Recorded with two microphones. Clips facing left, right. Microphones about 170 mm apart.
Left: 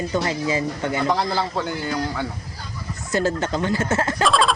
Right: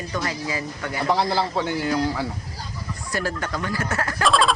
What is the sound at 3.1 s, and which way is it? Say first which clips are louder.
Speech: left 6 dB; 25° left (ahead or behind).